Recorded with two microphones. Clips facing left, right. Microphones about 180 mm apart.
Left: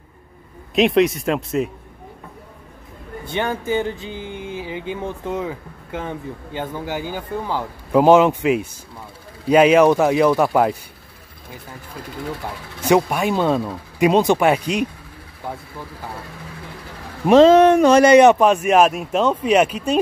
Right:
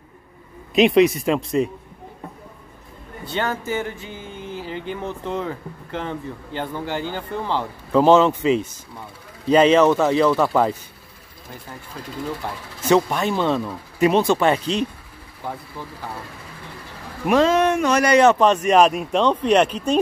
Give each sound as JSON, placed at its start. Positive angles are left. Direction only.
{"t": 0.7, "sound": "speech", "side_deg": 0}
{"t": 3.3, "sound": "speech", "side_deg": 15}
{"t": 12.8, "sound": "speech", "side_deg": 10}
{"t": 17.3, "sound": "speech", "side_deg": 30}